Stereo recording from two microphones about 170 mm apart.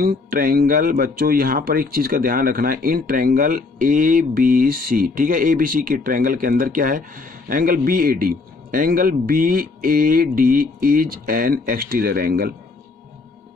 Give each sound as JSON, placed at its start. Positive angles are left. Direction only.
{"t": 0.0, "sound": "speech", "side_deg": -60}